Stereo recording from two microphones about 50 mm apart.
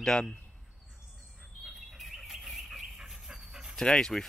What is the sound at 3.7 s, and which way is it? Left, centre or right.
Speech, centre.